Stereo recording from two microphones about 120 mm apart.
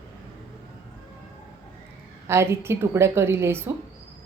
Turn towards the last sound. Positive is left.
turn(degrees=-20)  # may be behind; listen again after turning